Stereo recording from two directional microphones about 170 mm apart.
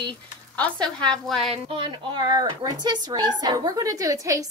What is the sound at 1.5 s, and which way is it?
A woman's voice, 30° right (ahead or behind).